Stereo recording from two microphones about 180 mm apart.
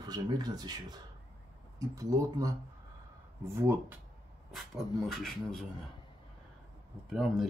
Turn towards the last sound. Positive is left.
turn(degrees=0)  # may be behind; listen again after turning